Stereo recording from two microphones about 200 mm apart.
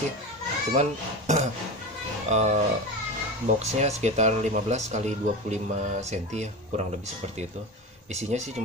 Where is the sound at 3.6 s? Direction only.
35° right (ahead or behind).